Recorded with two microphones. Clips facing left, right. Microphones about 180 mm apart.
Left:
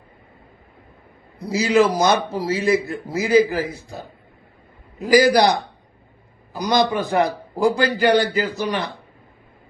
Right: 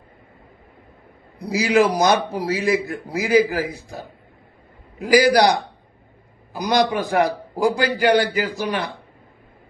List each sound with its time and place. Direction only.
1.5 s a man's voice: 15° right (ahead or behind)